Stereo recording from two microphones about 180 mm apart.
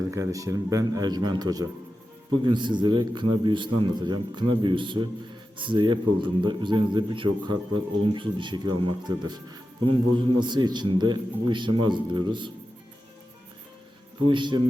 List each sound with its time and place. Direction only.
0.1 s a man's voice: 15° right (ahead or behind)
14.3 s a man's voice: 25° right (ahead or behind)